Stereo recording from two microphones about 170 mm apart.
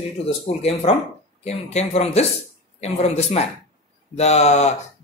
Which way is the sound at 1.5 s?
40° left (ahead or behind).